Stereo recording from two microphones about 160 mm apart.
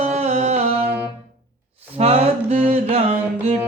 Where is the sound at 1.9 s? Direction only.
40° right (ahead or behind).